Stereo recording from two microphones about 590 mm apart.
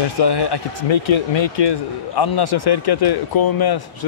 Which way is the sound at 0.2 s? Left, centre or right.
Left.